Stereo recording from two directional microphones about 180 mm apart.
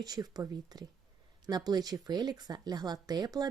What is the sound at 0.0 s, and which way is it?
Speech, 20° right (ahead or behind).